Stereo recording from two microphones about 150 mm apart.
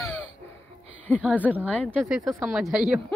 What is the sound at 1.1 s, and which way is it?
Speech, 10° left (ahead or behind).